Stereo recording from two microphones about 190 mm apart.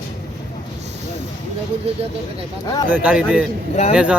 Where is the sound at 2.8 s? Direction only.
10° right (ahead or behind).